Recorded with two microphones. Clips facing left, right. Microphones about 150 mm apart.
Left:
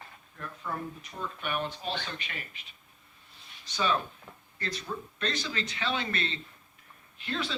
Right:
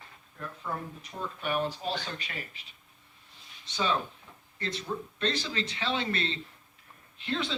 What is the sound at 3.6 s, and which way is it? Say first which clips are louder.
Speech: even; 25° right (ahead or behind).